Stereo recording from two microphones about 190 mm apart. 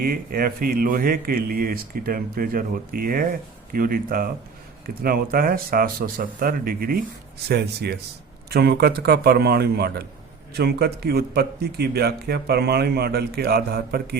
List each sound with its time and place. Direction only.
0.0 s speech: 50° right (ahead or behind)